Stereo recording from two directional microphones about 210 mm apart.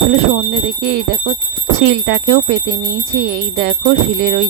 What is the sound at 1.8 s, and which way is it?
Speech, 50° right (ahead or behind).